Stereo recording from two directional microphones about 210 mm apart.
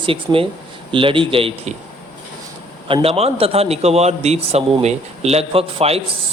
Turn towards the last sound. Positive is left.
turn(degrees=-30)  # may be behind; listen again after turning